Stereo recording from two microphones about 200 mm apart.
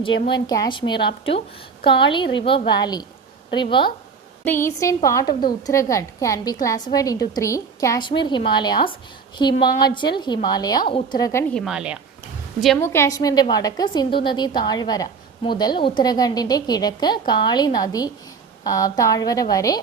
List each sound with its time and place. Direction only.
0.3 s a woman's voice: 20° left (ahead or behind)
4.4 s a woman's voice: 10° left (ahead or behind)
11.5 s a woman's voice: centre (ahead or behind)
12.8 s a woman's voice: 10° left (ahead or behind)